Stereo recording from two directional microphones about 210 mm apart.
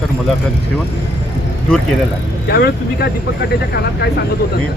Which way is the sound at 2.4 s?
50° left (ahead or behind).